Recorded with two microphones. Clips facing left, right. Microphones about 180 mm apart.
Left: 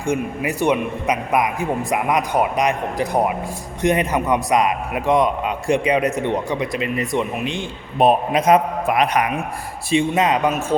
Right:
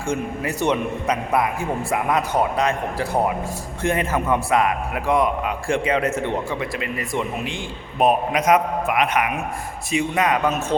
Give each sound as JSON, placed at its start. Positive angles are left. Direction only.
{"t": 0.0, "sound": "a man's voice", "side_deg": 15}
{"t": 7.9, "sound": "a man's voice", "side_deg": 30}
{"t": 9.9, "sound": "a man's voice", "side_deg": 25}